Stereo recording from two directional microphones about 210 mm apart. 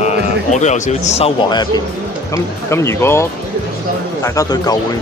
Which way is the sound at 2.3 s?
15° left (ahead or behind).